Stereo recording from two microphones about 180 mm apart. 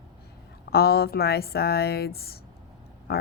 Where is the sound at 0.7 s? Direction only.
60° left (ahead or behind).